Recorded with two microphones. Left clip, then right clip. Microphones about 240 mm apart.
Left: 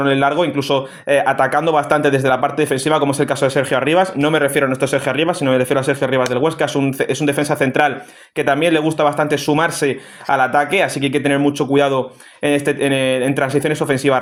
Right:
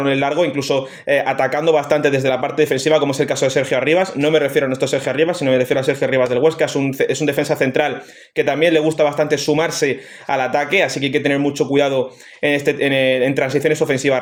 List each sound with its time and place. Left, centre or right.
0.0 s a man's voice: left